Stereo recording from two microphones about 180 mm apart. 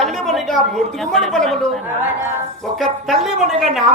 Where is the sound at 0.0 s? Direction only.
Centre (ahead or behind).